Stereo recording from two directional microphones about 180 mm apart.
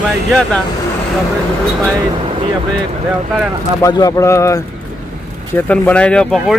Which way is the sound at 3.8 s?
20° left (ahead or behind).